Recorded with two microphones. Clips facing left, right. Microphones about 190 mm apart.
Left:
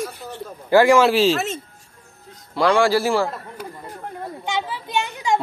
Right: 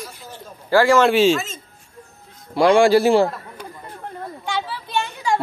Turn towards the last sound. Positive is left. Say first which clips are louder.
# even
turn(degrees=15)  # may be behind; listen again after turning